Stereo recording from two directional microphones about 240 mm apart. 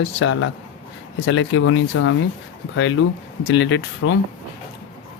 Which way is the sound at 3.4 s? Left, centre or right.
Left.